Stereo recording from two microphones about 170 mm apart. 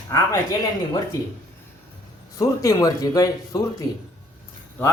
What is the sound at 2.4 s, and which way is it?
Speech, 20° left (ahead or behind).